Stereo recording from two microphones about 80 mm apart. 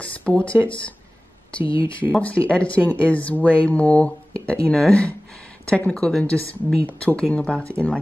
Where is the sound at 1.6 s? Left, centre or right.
Left.